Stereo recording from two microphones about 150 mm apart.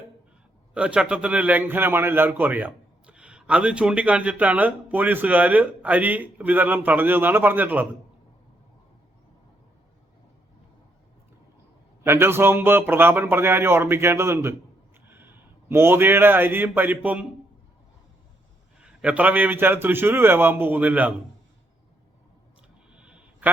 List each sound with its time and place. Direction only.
0.7 s a man's voice: 5° right (ahead or behind)
12.0 s a man's voice: 15° right (ahead or behind)
18.8 s a man's voice: 10° right (ahead or behind)
23.0 s a sound: 5° right (ahead or behind)